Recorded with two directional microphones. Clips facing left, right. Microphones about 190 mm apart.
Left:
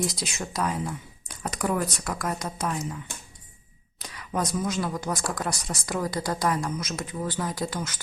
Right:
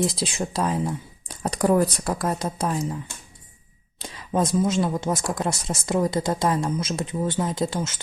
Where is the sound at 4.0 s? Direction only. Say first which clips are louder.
Right 5 dB; 25° right (ahead or behind).